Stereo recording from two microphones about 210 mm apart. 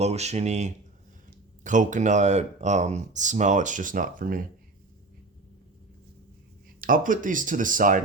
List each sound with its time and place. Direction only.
0.0 s speech: 30° right (ahead or behind)
6.8 s speech: 40° right (ahead or behind)